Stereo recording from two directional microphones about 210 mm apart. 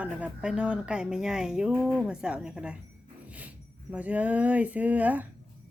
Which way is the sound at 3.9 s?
5° right (ahead or behind).